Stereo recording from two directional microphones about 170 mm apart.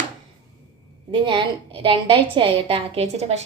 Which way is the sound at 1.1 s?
30° right (ahead or behind).